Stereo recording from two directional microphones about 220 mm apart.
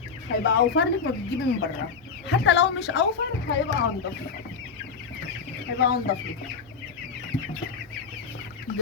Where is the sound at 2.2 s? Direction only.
50° left (ahead or behind).